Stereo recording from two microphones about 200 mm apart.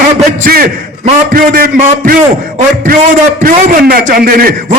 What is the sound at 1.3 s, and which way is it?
A man's voice, 45° right (ahead or behind).